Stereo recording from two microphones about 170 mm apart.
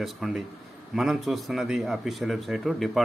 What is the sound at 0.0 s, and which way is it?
A man's voice, centre (ahead or behind).